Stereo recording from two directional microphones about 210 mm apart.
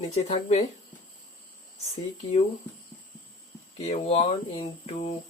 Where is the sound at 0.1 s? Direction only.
30° left (ahead or behind).